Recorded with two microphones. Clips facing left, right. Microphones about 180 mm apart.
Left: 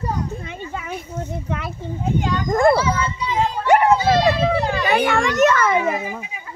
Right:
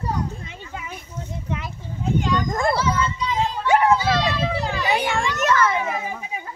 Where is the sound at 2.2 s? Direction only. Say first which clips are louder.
Left 9 dB; 55° left (ahead or behind).